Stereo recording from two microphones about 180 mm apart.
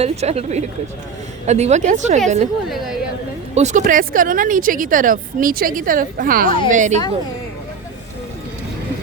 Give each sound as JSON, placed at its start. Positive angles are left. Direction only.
{"t": 0.0, "sound": "speech", "side_deg": -35}
{"t": 2.6, "sound": "a woman's voice", "side_deg": 0}
{"t": 3.5, "sound": "speech", "side_deg": -40}